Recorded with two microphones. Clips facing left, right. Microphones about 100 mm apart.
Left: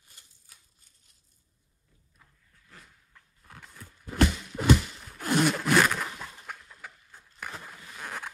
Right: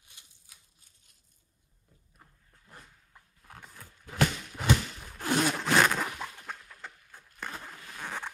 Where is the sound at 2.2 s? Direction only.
30° right (ahead or behind).